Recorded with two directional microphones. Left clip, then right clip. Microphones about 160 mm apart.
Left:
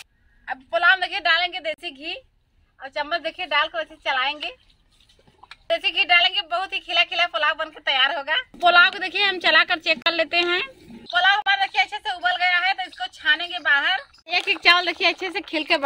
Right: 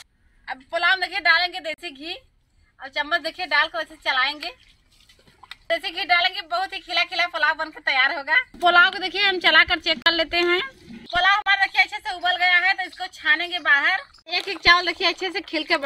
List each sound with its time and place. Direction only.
0.5 s a woman's voice: centre (ahead or behind)
6.0 s speech: 5° left (ahead or behind)
11.1 s speech: 5° left (ahead or behind)